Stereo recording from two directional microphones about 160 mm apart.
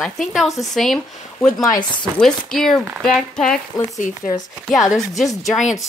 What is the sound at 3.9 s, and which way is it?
Speech, 55° left (ahead or behind).